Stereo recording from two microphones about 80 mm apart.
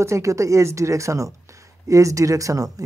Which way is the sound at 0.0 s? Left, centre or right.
Right.